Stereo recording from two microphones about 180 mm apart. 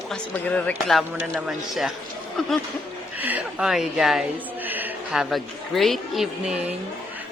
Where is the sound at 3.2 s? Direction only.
10° right (ahead or behind).